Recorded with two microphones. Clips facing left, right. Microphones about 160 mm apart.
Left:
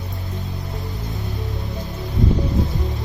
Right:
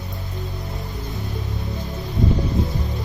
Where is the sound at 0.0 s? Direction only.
Centre (ahead or behind).